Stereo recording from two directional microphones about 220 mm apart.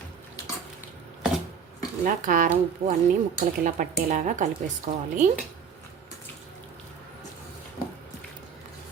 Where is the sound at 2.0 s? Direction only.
35° right (ahead or behind).